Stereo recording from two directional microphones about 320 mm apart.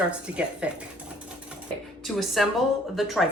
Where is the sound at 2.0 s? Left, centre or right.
Centre.